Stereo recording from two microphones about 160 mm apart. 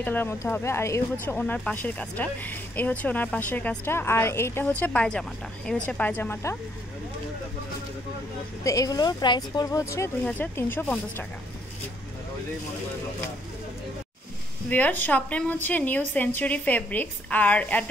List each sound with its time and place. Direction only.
0.0 s speech: 10° left (ahead or behind)
8.6 s speech: 20° left (ahead or behind)
14.7 s speech: 10° left (ahead or behind)